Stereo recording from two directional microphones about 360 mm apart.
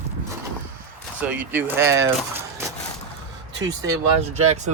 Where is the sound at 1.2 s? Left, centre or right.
Centre.